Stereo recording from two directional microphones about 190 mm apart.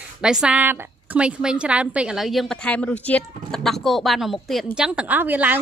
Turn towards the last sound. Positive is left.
turn(degrees=-10)  # may be behind; listen again after turning